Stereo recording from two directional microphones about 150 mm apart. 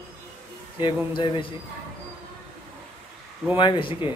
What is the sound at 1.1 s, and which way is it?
Speech, 35° left (ahead or behind).